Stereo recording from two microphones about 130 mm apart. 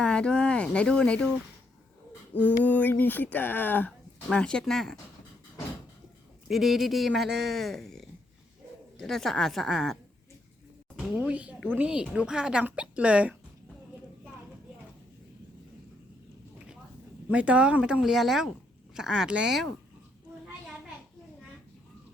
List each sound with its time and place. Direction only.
0.0 s speech: 5° left (ahead or behind)
2.3 s speech: 10° left (ahead or behind)
6.5 s a woman's voice: centre (ahead or behind)
17.2 s a woman's voice: 10° right (ahead or behind)